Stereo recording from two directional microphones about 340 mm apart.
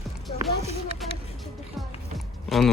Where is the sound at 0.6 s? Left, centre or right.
Centre.